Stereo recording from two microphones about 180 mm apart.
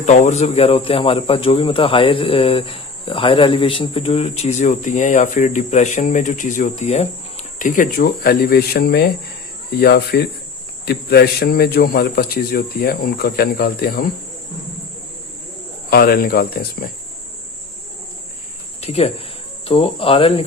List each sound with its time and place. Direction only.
0.0 s a man's voice: 40° left (ahead or behind); by 14.0 s 60° left (ahead or behind)
15.9 s a man's voice: 55° left (ahead or behind)
18.8 s cricket: 35° left (ahead or behind)